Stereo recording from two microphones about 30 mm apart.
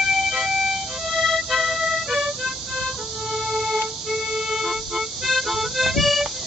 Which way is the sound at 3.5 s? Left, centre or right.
Centre.